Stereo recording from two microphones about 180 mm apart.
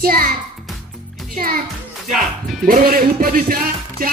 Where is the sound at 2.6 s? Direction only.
50° right (ahead or behind).